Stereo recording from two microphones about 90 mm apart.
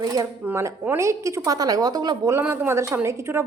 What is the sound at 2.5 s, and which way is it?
Speech, 30° right (ahead or behind).